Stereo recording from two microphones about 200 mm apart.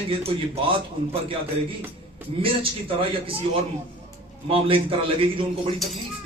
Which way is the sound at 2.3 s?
30° right (ahead or behind).